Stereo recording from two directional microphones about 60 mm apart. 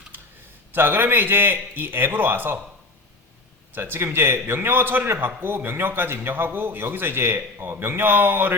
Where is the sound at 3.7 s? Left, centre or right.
Right.